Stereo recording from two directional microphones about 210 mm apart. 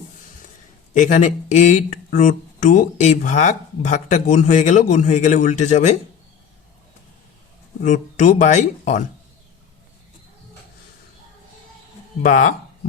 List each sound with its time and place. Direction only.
0.9 s speech: 35° left (ahead or behind)
7.8 s speech: 35° left (ahead or behind)
12.2 s speech: 40° left (ahead or behind)